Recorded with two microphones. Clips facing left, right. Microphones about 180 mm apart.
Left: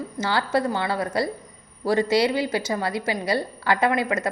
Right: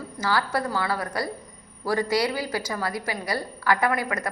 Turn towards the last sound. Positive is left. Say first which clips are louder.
# left 3 dB
turn(degrees=25)  # may be behind; listen again after turning